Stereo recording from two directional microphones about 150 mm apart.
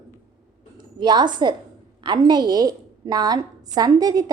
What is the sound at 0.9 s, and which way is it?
A woman's voice, 30° right (ahead or behind).